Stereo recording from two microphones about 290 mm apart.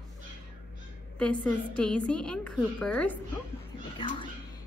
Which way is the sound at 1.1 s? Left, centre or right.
Centre.